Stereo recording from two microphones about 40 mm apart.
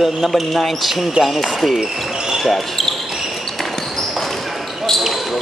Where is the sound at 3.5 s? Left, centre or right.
Centre.